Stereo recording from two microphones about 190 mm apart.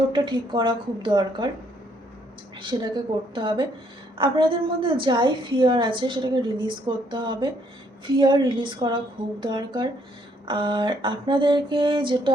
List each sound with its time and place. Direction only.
0.1 s a woman's voice: 25° right (ahead or behind)
2.6 s a woman's voice: 25° right (ahead or behind)